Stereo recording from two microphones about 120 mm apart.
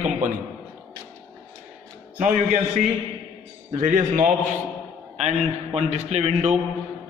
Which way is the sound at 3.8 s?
90° right.